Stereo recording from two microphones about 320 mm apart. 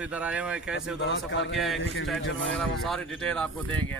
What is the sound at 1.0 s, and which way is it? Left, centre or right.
Speech, left.